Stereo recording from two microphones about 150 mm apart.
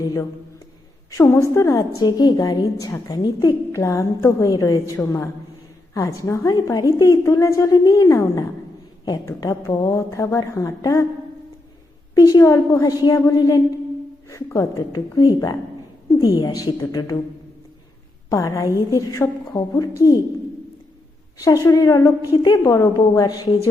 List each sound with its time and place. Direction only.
0.0 s a woman's voice: 20° left (ahead or behind)
12.1 s a woman's voice: 20° left (ahead or behind)
18.3 s a woman's voice: 20° left (ahead or behind)
21.3 s a woman's voice: 25° left (ahead or behind)